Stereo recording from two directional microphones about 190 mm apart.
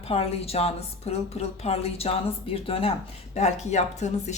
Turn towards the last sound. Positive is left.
turn(degrees=35)  # may be behind; listen again after turning